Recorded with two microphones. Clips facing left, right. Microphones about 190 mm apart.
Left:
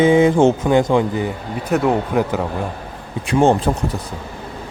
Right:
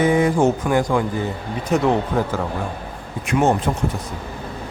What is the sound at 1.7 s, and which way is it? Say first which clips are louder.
Speech: left 1 dB; 10° left (ahead or behind).